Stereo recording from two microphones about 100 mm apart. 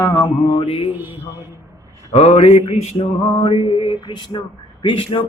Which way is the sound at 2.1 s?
90° left.